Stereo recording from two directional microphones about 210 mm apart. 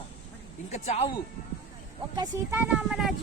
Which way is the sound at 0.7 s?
30° left (ahead or behind).